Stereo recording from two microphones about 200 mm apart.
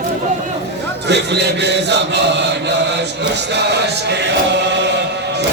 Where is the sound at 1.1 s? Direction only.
55° right (ahead or behind).